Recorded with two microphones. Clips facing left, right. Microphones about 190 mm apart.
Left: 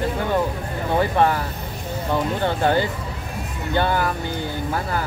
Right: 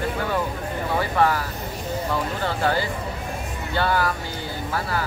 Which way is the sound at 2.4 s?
20° left (ahead or behind).